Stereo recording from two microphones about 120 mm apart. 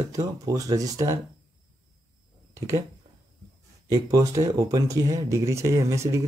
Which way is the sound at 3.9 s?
30° right (ahead or behind).